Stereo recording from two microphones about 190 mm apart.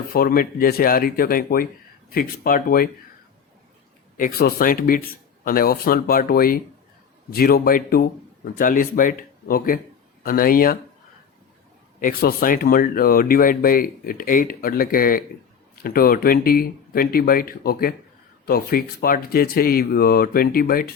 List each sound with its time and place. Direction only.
0.1 s speech: 50° left (ahead or behind)
4.2 s speech: 50° left (ahead or behind)
11.9 s speech: 50° left (ahead or behind)